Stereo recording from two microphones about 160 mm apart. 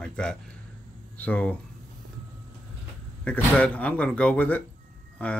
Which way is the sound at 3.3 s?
10° left (ahead or behind).